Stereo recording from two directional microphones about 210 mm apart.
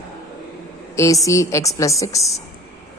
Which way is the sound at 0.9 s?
15° left (ahead or behind).